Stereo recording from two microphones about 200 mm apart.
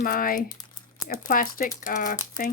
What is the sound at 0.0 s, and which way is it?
A woman's voice, 45° left (ahead or behind).